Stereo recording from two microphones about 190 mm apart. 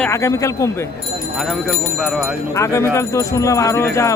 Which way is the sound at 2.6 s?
15° left (ahead or behind).